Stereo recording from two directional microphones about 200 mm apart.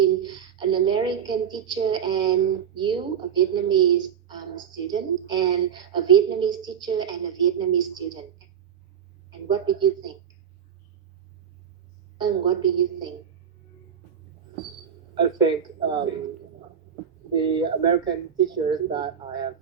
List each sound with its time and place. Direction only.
0.0 s a woman's voice: 20° right (ahead or behind)
9.5 s a woman's voice: 20° right (ahead or behind)
12.1 s a woman's voice: 20° right (ahead or behind)
15.1 s a woman's voice: 20° right (ahead or behind)
17.3 s a woman's voice: 20° right (ahead or behind)